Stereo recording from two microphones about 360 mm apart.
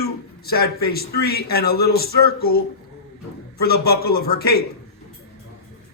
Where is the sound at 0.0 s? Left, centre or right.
Left.